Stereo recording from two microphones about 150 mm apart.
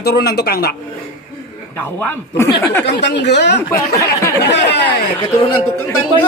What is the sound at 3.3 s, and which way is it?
Speech, 90° left.